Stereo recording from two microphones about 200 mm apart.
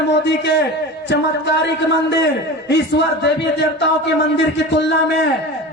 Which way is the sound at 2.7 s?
60° left (ahead or behind).